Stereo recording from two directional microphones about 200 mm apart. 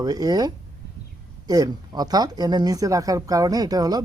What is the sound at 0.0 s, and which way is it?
Speech, 20° right (ahead or behind).